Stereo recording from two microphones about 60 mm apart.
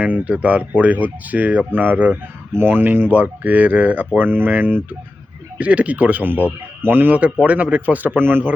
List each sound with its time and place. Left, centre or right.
0.0 s speech: right